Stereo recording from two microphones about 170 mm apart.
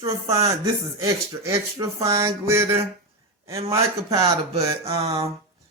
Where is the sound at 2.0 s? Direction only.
15° right (ahead or behind).